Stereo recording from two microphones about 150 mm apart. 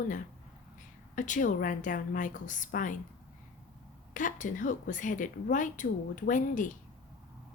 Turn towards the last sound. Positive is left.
turn(degrees=60)  # may be behind; listen again after turning